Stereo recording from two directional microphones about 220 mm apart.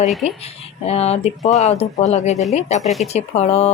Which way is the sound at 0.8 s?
30° left (ahead or behind).